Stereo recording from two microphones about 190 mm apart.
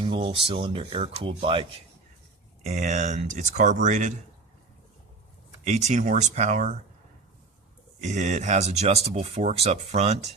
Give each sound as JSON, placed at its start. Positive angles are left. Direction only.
{"t": 0.0, "sound": "speech", "side_deg": -25}
{"t": 2.6, "sound": "speech", "side_deg": -40}
{"t": 5.6, "sound": "speech", "side_deg": -40}
{"t": 8.0, "sound": "speech", "side_deg": -40}